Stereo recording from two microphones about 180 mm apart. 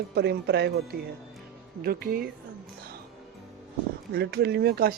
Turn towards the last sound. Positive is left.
turn(degrees=-60)  # may be behind; listen again after turning